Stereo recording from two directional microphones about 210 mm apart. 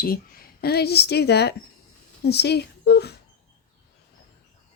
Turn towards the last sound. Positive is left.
turn(degrees=50)  # may be behind; listen again after turning